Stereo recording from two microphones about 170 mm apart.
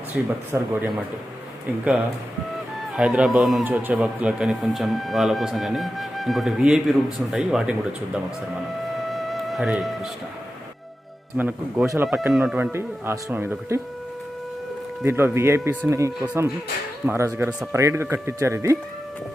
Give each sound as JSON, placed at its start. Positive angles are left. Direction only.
{"t": 0.1, "sound": "speech", "side_deg": -10}
{"t": 2.9, "sound": "speech", "side_deg": -5}
{"t": 9.0, "sound": "music", "side_deg": 0}
{"t": 11.3, "sound": "speech", "side_deg": -10}
{"t": 15.0, "sound": "speech", "side_deg": -15}